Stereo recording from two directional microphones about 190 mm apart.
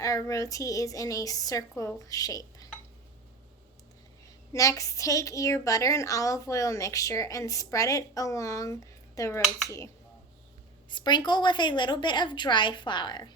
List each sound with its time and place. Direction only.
0.0 s a woman's voice: 20° left (ahead or behind)
4.5 s a woman's voice: 15° left (ahead or behind)